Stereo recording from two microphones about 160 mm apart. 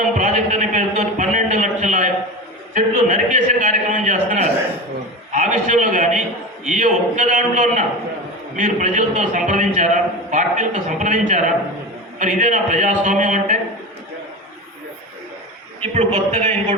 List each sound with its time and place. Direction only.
0.0 s a sound: 50° right (ahead or behind)
2.7 s a man's voice: 50° right (ahead or behind)
15.8 s a man's voice: 40° right (ahead or behind)